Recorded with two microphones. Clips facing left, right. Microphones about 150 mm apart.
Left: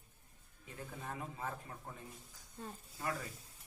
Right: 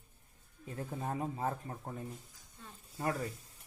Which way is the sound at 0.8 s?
35° right (ahead or behind).